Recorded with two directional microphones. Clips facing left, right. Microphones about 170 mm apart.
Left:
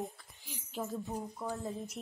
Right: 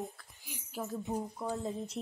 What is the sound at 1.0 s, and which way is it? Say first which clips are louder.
Speech: right 3 dB; 20° right (ahead or behind).